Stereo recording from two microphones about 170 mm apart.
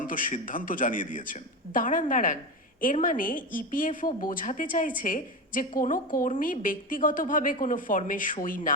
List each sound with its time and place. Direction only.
0.0 s speech: 50° left (ahead or behind)